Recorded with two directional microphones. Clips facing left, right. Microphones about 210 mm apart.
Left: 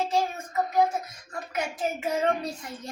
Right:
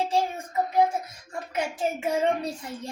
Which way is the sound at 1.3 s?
25° right (ahead or behind).